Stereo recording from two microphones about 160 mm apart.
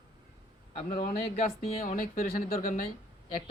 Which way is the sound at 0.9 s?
60° left (ahead or behind).